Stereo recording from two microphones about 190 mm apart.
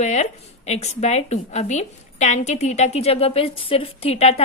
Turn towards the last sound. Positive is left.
turn(degrees=30)  # may be behind; listen again after turning